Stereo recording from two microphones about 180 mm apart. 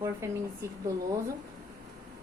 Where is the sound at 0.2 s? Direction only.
15° right (ahead or behind).